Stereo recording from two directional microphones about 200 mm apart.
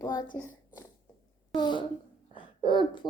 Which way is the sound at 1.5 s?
20° left (ahead or behind).